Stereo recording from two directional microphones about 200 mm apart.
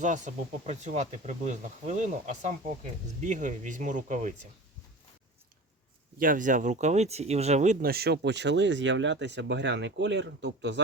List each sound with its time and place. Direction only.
0.0 s speech: 40° right (ahead or behind)
6.1 s speech: 40° right (ahead or behind); by 10.8 s 60° right (ahead or behind)